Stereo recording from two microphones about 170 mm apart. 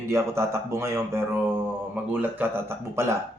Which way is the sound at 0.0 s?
15° right (ahead or behind).